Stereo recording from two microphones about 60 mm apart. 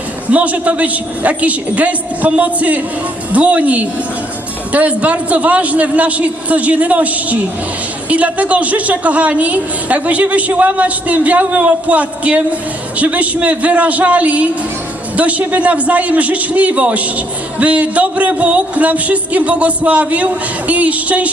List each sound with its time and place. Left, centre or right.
0.3 s a man's voice: right